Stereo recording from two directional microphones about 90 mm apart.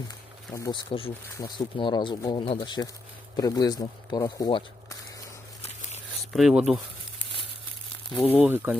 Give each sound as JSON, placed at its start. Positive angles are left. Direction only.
{"t": 0.7, "sound": "speech", "side_deg": 90}
{"t": 1.4, "sound": "speech", "side_deg": 50}
{"t": 2.3, "sound": "speech", "side_deg": 90}
{"t": 2.6, "sound": "speech", "side_deg": 50}
{"t": 6.3, "sound": "speech", "side_deg": -5}
{"t": 8.3, "sound": "speech", "side_deg": -20}